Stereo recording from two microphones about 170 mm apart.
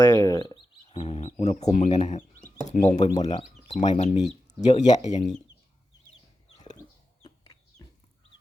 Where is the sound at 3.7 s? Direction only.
40° left (ahead or behind).